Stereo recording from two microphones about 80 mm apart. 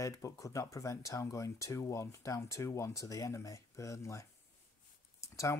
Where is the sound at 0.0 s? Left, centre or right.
Left.